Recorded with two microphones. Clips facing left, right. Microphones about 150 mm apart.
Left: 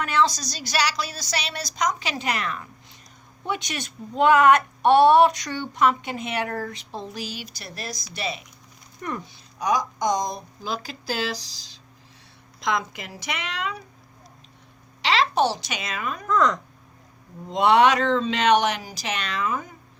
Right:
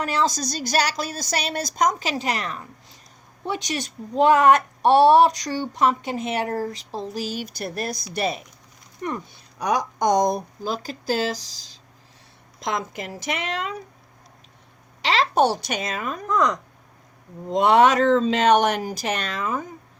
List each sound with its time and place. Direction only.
0.0 s a woman's voice: 40° right (ahead or behind)
9.6 s speech: 60° right (ahead or behind)
10.6 s a woman's voice: 45° right (ahead or behind)
15.0 s a woman's voice: 45° right (ahead or behind)
16.3 s speech: 15° right (ahead or behind)
17.5 s a woman's voice: 45° right (ahead or behind)